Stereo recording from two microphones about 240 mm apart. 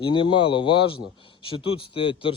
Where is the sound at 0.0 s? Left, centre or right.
Centre.